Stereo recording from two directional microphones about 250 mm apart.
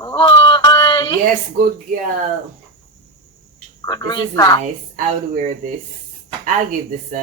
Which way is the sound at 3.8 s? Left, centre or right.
Centre.